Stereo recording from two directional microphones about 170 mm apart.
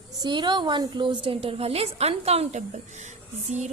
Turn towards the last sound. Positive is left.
turn(degrees=-45)  # may be behind; listen again after turning